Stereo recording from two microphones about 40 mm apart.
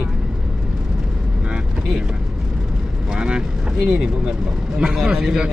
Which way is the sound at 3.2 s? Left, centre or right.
Right.